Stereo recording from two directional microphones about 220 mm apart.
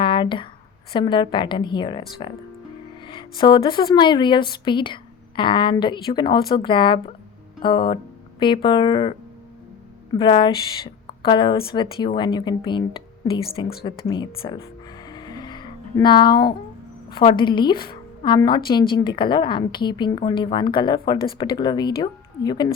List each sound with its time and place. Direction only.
0.0 s a sound: 20° left (ahead or behind)
0.9 s a woman's voice: 20° left (ahead or behind)
3.1 s a woman's voice: 20° left (ahead or behind)
10.2 s a woman's voice: 20° left (ahead or behind)
15.1 s music: 20° left (ahead or behind)
17.2 s a woman's voice: 20° left (ahead or behind)